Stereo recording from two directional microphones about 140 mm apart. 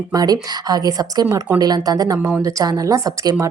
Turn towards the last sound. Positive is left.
turn(degrees=-25)  # may be behind; listen again after turning